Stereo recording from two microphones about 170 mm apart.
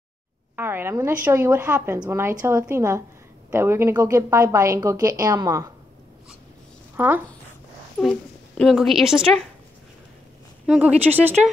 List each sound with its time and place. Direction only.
0.6 s a woman's voice: 15° right (ahead or behind)
7.0 s a woman's voice: 10° right (ahead or behind)
8.0 s a woman's voice: 5° left (ahead or behind)
10.7 s a woman's voice: 10° right (ahead or behind)